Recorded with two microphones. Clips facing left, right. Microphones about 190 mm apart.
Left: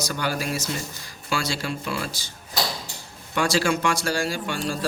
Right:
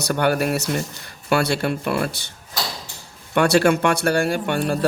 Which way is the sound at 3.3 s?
60° right (ahead or behind).